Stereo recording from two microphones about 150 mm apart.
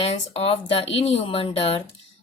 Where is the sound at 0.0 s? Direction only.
45° left (ahead or behind).